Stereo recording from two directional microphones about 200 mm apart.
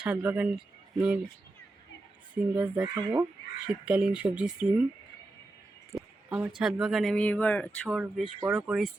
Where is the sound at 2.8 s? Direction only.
20° right (ahead or behind).